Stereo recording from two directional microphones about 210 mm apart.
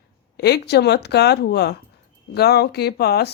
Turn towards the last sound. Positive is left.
turn(degrees=50)  # may be behind; listen again after turning